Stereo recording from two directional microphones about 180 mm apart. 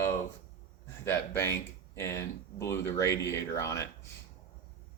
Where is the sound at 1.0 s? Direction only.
15° left (ahead or behind).